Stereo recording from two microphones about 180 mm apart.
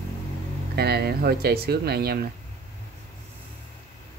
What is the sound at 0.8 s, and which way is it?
Speech, 60° right (ahead or behind).